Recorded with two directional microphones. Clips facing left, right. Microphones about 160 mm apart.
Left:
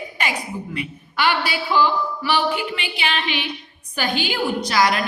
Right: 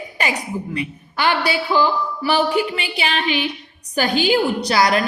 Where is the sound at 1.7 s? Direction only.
40° right (ahead or behind).